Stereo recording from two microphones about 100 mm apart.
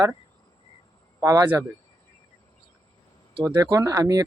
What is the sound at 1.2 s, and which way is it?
Speech, 35° right (ahead or behind).